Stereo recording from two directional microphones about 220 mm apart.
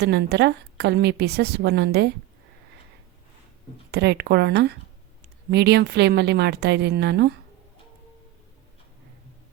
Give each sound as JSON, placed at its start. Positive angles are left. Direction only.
{"t": 0.0, "sound": "a woman's voice", "side_deg": -50}
{"t": 3.9, "sound": "a woman's voice", "side_deg": -50}